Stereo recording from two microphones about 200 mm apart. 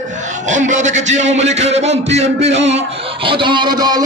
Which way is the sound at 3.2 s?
25° right (ahead or behind).